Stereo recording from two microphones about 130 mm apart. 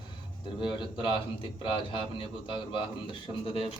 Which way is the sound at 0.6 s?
35° left (ahead or behind).